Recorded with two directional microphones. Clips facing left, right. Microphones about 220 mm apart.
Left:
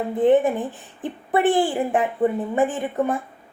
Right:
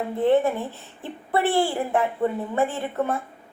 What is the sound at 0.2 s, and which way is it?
Speech, 15° left (ahead or behind).